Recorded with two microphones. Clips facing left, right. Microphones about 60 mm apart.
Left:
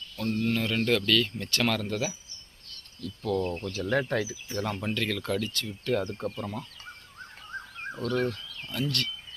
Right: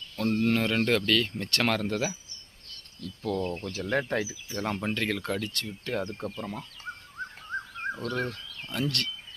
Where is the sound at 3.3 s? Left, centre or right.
Right.